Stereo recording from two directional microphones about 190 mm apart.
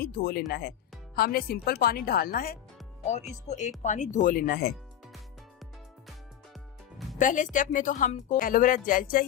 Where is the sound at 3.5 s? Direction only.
40° left (ahead or behind).